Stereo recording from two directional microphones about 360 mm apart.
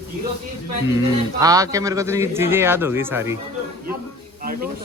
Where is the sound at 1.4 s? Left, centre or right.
Centre.